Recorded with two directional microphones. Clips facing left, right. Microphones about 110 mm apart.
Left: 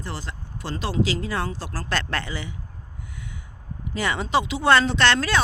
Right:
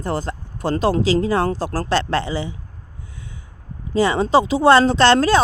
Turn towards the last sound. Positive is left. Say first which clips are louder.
# right 7 dB
turn(degrees=-35)  # may be behind; listen again after turning